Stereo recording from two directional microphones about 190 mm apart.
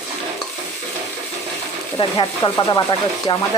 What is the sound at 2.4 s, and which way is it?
Speech, 20° left (ahead or behind).